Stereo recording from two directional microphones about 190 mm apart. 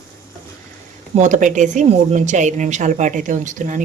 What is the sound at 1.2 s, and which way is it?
Speech, 40° right (ahead or behind).